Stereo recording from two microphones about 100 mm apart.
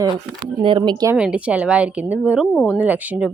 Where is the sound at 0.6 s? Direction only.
55° right (ahead or behind).